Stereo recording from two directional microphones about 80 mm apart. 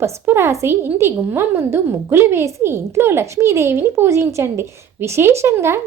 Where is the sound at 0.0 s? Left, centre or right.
Right.